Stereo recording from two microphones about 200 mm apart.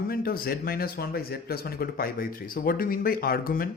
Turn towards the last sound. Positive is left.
turn(degrees=45)  # may be behind; listen again after turning